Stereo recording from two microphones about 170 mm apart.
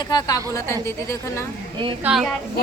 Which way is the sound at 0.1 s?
20° left (ahead or behind).